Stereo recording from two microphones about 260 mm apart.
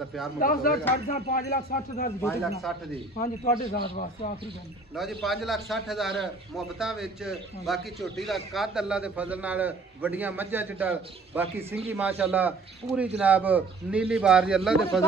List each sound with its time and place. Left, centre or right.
0.4 s a man's voice: left
1.4 s speech: left
2.7 s a man's voice: centre
3.2 s a man's voice: left
4.9 s a man's voice: centre